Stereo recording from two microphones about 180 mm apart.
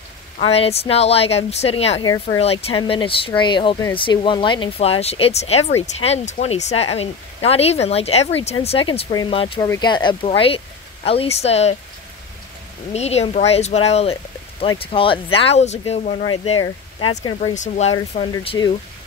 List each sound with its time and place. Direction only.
0.4 s speech: 35° left (ahead or behind)
12.9 s speech: 35° left (ahead or behind)